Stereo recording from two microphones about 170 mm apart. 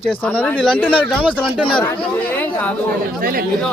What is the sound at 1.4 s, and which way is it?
Speech, 30° left (ahead or behind).